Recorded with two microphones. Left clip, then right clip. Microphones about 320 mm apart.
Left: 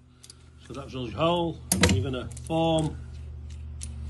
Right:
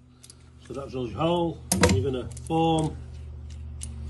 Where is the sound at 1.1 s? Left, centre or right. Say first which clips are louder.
Left 1 dB; left.